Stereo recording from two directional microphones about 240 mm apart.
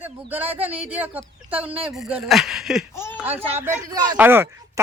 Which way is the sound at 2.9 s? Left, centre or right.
Centre.